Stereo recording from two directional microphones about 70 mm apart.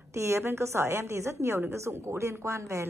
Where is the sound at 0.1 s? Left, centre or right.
Right.